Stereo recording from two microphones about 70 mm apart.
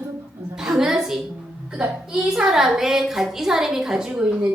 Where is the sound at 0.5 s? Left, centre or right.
Centre.